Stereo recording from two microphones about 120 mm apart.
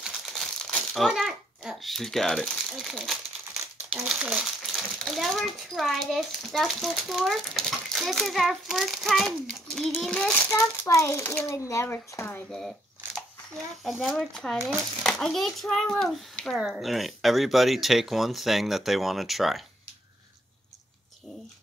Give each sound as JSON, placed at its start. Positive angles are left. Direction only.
{"t": 0.0, "sound": "crumpling", "side_deg": 0}
{"t": 3.9, "sound": "speech", "side_deg": -10}
{"t": 4.7, "sound": "a child's voice", "side_deg": 5}
{"t": 10.3, "sound": "a child's voice", "side_deg": 20}
{"t": 12.3, "sound": "a child's voice", "side_deg": 10}
{"t": 14.6, "sound": "speech", "side_deg": -20}
{"t": 15.0, "sound": "a child's voice", "side_deg": 5}